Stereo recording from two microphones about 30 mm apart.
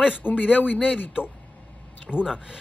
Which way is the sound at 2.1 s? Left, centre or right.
Right.